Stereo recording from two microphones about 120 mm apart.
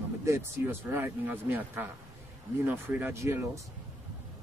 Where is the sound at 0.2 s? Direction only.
20° right (ahead or behind).